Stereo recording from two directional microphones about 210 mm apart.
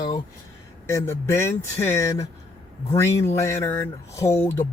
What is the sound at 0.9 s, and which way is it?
Speech, 15° left (ahead or behind).